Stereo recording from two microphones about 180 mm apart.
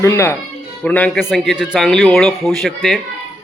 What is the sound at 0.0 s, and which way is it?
Speech, 15° left (ahead or behind).